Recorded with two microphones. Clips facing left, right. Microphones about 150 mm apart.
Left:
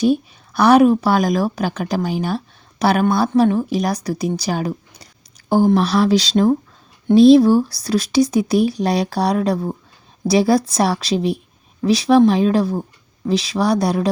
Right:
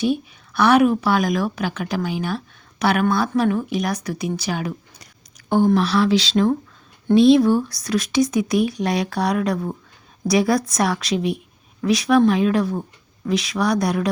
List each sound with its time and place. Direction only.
0.0 s speech: 40° left (ahead or behind)
5.4 s a sound: 30° left (ahead or behind)
5.7 s speech: 40° left (ahead or behind)